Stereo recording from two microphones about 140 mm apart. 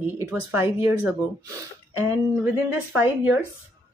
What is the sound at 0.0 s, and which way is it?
Speech, 10° right (ahead or behind).